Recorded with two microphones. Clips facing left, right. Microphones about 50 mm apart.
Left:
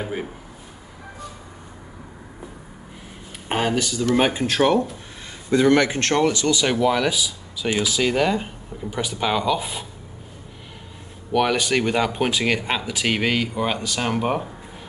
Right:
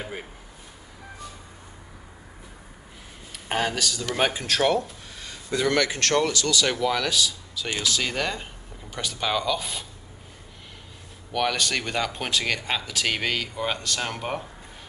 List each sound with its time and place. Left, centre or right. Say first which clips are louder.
0.0 s speech: left 7 dB; centre
3.4 s speech: left 4 dB; left
11.3 s speech: left 6 dB; centre